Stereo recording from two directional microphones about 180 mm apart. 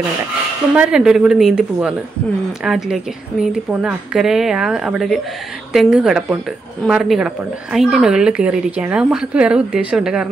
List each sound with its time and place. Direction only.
0.7 s a woman's voice: 5° right (ahead or behind)